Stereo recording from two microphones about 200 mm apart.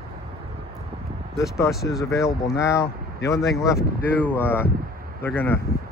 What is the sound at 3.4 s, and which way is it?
Speech, centre (ahead or behind).